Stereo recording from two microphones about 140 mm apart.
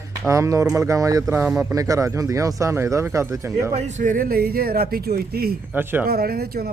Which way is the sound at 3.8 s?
55° right (ahead or behind).